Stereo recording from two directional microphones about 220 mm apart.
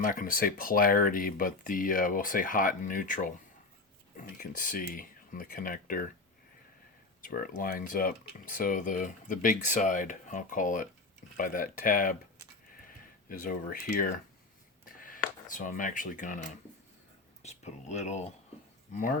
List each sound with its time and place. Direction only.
0.0 s speech: 40° left (ahead or behind)
4.4 s speech: 40° left (ahead or behind)
7.2 s speech: 40° left (ahead or behind)
13.2 s speech: 40° left (ahead or behind)
14.8 s a sound: 40° left (ahead or behind)
17.4 s speech: 30° left (ahead or behind)